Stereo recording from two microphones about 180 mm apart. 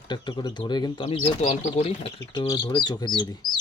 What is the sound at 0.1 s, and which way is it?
Speech, 25° left (ahead or behind).